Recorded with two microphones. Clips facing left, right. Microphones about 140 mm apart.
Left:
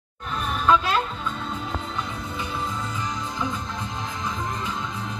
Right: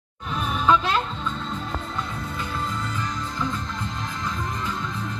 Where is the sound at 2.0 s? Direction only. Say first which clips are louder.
Even; 15° left (ahead or behind).